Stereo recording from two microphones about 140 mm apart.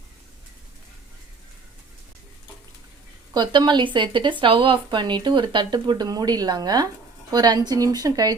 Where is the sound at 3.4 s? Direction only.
30° right (ahead or behind).